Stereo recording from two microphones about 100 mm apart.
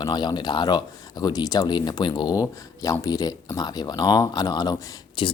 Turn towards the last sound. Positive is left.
turn(degrees=55)  # may be behind; listen again after turning